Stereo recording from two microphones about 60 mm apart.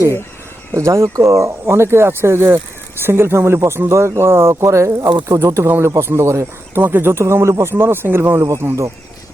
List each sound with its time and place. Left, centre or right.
0.7 s speech: right
6.7 s speech: right